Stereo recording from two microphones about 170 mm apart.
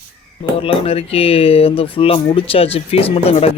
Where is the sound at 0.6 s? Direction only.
35° left (ahead or behind).